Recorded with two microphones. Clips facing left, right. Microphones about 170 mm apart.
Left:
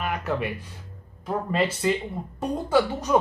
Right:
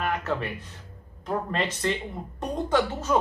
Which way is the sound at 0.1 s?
10° left (ahead or behind).